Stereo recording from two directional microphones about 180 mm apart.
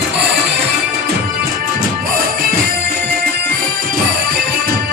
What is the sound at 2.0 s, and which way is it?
Music, 55° right (ahead or behind).